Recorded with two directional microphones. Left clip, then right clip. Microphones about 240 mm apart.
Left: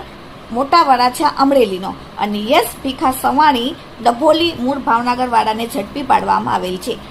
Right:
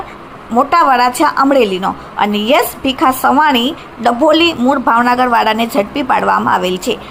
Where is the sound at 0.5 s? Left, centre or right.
Centre.